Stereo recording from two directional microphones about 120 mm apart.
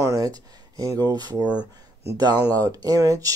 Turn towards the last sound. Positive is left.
turn(degrees=-30)  # may be behind; listen again after turning